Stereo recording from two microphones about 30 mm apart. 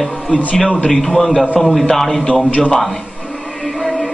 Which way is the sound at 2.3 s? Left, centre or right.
Left.